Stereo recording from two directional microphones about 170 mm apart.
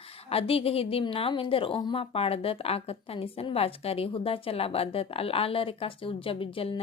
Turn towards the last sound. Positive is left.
turn(degrees=35)  # may be behind; listen again after turning